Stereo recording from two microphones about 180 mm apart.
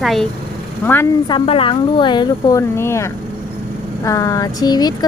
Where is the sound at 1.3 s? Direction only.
30° left (ahead or behind).